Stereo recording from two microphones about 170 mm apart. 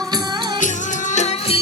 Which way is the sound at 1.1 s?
40° left (ahead or behind).